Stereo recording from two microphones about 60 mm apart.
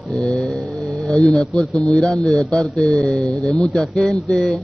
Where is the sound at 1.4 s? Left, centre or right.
Centre.